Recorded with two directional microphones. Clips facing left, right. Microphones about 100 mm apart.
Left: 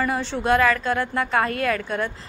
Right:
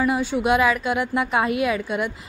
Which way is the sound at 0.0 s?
10° right (ahead or behind).